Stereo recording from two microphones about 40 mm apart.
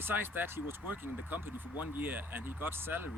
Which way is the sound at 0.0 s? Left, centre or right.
Right.